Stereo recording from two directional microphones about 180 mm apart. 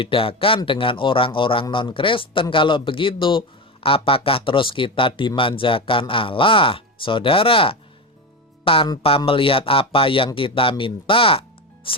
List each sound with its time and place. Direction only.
0.0 s speech: 30° left (ahead or behind)